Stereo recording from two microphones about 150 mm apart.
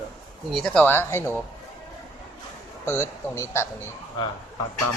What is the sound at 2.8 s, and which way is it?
Speech, 20° left (ahead or behind).